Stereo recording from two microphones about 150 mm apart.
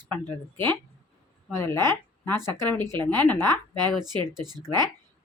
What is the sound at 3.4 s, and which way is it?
Speech, 25° right (ahead or behind).